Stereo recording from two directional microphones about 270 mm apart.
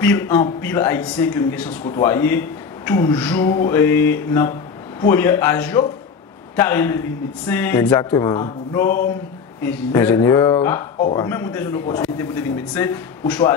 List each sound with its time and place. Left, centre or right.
0.0 s speech: centre